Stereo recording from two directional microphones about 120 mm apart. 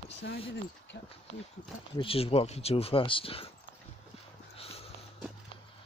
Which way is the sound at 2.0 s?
50° left (ahead or behind).